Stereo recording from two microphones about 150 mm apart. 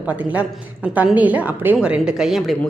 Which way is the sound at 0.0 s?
10° right (ahead or behind).